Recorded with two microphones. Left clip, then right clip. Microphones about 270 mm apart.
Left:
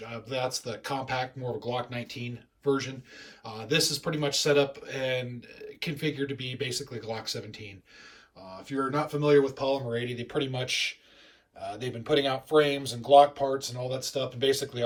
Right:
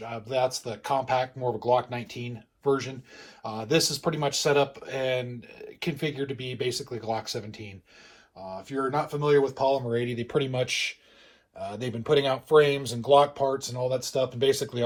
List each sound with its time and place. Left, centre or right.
0.0 s speech: centre